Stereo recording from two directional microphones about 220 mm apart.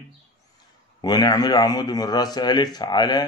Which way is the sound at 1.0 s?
20° left (ahead or behind).